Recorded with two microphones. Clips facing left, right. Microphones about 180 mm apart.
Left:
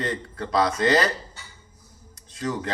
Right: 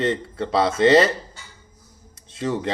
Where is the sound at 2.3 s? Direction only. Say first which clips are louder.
Right 4 dB; 25° right (ahead or behind).